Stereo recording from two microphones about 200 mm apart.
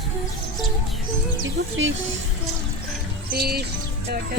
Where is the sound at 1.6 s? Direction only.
60° right (ahead or behind).